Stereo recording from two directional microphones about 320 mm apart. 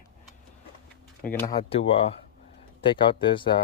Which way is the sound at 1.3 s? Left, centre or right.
Centre.